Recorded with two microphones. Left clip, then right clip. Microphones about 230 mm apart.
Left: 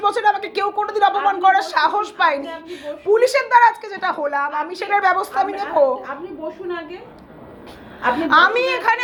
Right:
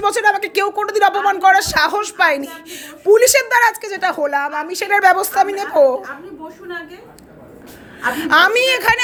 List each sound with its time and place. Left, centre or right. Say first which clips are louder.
0.0 s speech: right 2 dB; right
8.1 s speech: right 1 dB; right